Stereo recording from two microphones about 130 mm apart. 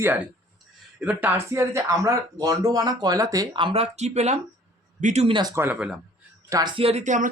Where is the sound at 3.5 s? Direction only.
40° right (ahead or behind); by 5.3 s 65° right (ahead or behind).